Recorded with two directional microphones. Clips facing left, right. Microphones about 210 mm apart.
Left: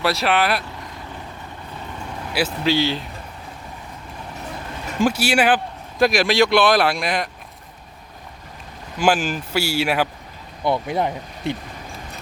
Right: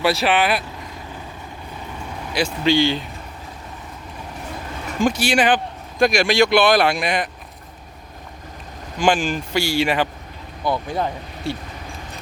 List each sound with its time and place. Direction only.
0.0 s speech: centre (ahead or behind)
2.3 s speech: 5° left (ahead or behind)
5.0 s speech: 5° left (ahead or behind)
9.0 s speech: 5° left (ahead or behind)
10.6 s speech: 25° left (ahead or behind)